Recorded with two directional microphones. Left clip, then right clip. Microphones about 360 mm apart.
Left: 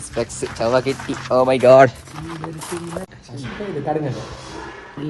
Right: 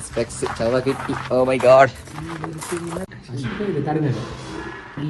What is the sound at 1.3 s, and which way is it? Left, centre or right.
Speech, centre.